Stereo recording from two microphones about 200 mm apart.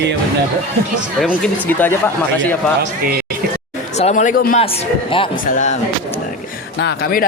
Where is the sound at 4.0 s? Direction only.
35° left (ahead or behind).